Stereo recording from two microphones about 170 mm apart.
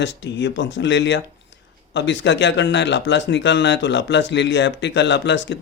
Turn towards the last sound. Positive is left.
turn(degrees=90)